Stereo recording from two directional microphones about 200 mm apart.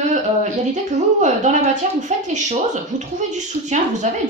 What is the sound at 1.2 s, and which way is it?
Speech, 35° right (ahead or behind).